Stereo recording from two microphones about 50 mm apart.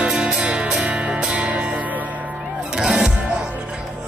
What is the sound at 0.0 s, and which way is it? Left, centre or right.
Music, centre.